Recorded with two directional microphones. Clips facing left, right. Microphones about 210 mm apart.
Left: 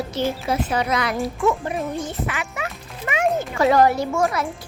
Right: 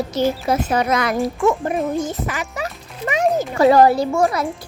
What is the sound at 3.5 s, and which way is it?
Speech, 35° right (ahead or behind).